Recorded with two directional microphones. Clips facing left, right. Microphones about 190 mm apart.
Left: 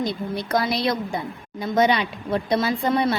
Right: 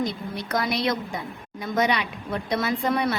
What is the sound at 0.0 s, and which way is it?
A woman's voice, 30° left (ahead or behind).